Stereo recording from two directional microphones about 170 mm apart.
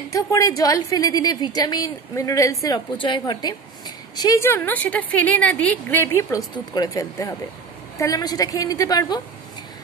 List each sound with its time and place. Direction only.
0.1 s a woman's voice: 20° left (ahead or behind)